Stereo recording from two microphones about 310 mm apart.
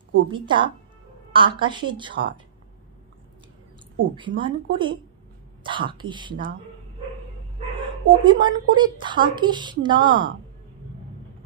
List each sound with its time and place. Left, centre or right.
0.3 s a woman's voice: centre
4.1 s a woman's voice: centre
7.8 s a woman's voice: centre